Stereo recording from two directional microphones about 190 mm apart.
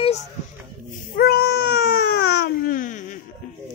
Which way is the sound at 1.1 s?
55° left (ahead or behind).